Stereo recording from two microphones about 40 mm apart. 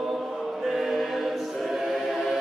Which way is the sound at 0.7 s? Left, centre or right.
Centre.